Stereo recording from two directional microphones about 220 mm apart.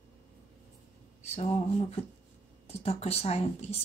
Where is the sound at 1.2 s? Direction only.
30° left (ahead or behind).